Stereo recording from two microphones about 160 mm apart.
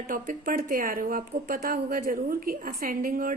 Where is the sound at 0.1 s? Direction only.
60° right (ahead or behind).